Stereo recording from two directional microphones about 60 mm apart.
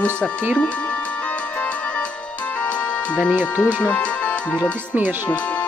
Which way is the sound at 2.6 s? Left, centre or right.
Left.